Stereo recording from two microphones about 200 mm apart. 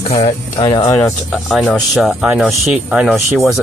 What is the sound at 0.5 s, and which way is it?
Speech, 25° left (ahead or behind).